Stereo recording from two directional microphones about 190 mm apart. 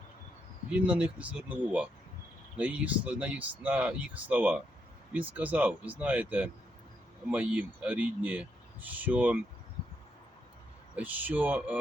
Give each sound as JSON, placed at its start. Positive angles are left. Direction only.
{"t": 0.7, "sound": "speech", "side_deg": -5}
{"t": 10.9, "sound": "speech", "side_deg": -10}